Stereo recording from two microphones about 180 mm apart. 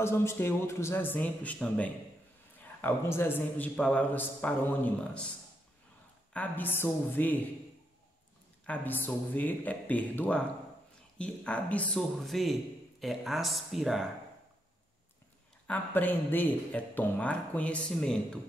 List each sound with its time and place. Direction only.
0.0 s speech: 15° left (ahead or behind)
6.3 s speech: 10° left (ahead or behind)
8.6 s speech: 10° left (ahead or behind)
15.6 s speech: 10° left (ahead or behind)